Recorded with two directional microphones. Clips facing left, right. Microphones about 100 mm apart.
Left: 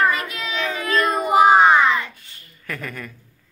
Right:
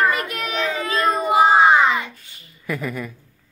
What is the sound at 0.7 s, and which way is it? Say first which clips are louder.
Speech: left 1 dB; 25° right (ahead or behind).